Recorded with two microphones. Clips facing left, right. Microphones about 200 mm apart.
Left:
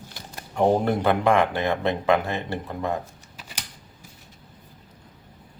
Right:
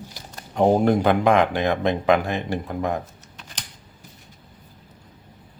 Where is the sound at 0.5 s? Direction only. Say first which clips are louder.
Right 3 dB; 15° right (ahead or behind).